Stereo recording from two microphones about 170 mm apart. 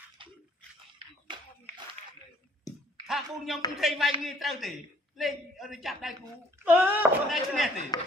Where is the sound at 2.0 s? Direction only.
40° right (ahead or behind).